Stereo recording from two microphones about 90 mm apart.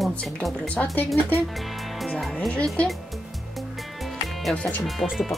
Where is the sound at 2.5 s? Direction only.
15° left (ahead or behind).